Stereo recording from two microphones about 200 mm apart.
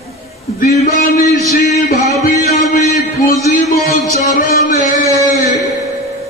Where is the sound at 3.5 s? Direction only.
40° left (ahead or behind).